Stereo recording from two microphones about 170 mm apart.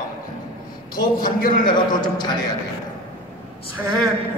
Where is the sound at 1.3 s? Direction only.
55° left (ahead or behind).